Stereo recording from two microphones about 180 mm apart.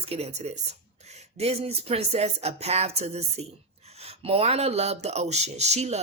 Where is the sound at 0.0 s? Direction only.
35° right (ahead or behind).